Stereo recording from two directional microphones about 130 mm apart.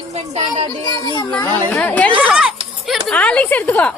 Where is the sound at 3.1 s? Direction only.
10° left (ahead or behind).